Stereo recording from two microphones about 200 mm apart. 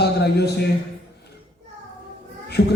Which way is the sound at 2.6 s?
55° left (ahead or behind).